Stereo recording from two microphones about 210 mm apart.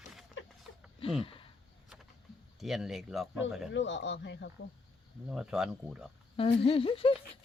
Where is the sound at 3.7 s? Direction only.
60° left (ahead or behind).